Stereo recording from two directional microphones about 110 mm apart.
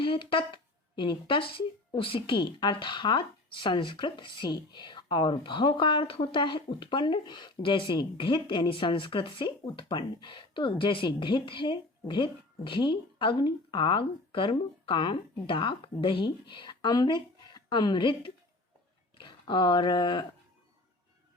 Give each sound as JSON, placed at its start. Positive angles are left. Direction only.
{"t": 0.0, "sound": "speech", "side_deg": 50}